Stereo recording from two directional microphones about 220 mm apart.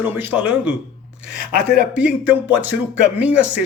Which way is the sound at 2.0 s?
5° right (ahead or behind).